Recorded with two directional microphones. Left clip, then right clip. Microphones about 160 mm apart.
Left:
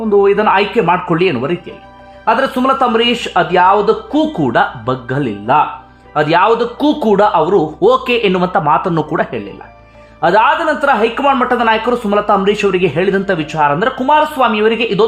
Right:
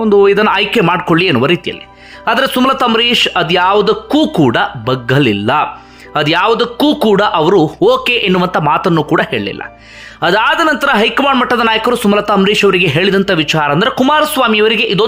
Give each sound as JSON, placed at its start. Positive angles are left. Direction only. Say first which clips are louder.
{"t": 0.1, "sound": "speech", "louder": "right 1 dB", "side_deg": -20}
{"t": 4.4, "sound": "speech", "louder": "right 1 dB", "side_deg": -20}
{"t": 7.9, "sound": "a man's voice", "louder": "left 2 dB", "side_deg": -10}